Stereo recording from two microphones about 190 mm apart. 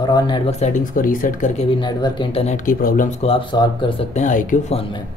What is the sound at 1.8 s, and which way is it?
Speech, 25° left (ahead or behind).